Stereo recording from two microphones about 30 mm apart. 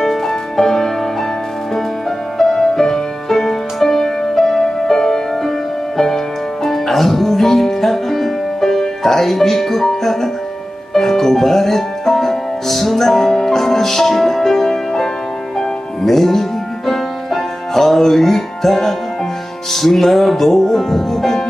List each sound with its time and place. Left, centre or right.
0.0 s music: centre
2.4 s music: centre